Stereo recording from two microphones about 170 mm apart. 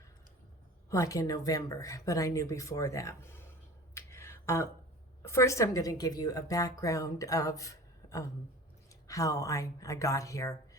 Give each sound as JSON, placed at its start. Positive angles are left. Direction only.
{"t": 0.9, "sound": "speech", "side_deg": 20}
{"t": 3.9, "sound": "a sound", "side_deg": 15}
{"t": 5.2, "sound": "speech", "side_deg": 15}